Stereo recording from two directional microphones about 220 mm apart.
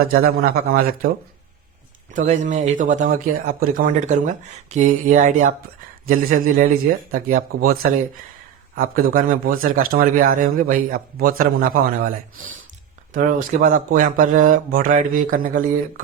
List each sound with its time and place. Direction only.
0.1 s a man's voice: 45° right (ahead or behind)
2.1 s a man's voice: 35° right (ahead or behind)